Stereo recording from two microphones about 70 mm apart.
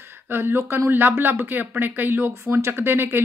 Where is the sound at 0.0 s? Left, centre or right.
Right.